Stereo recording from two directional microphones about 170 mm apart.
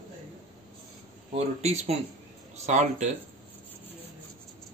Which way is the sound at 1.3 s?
40° right (ahead or behind).